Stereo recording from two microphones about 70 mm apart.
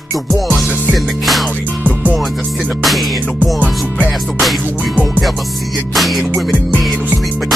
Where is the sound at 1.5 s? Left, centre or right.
Right.